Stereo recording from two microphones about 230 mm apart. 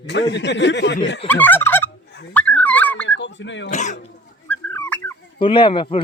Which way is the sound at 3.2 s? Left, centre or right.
Left.